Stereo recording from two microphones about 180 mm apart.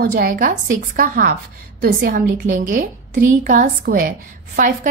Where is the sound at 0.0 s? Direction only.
50° right (ahead or behind).